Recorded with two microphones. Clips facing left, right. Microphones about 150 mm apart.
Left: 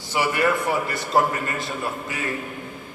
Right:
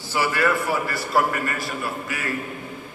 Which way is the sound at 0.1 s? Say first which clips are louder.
Even; 20° left (ahead or behind).